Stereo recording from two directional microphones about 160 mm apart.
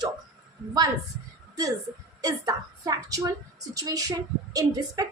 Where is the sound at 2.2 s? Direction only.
25° right (ahead or behind).